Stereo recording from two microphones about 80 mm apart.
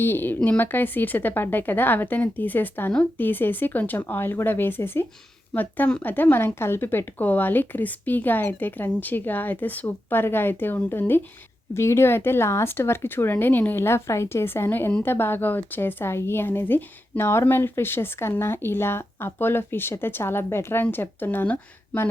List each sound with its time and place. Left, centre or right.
0.0 s a woman's voice: left